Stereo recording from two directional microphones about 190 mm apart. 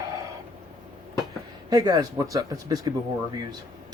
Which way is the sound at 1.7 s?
20° right (ahead or behind).